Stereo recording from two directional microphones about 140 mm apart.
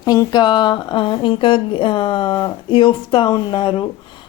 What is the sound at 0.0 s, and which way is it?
Speech, 30° left (ahead or behind).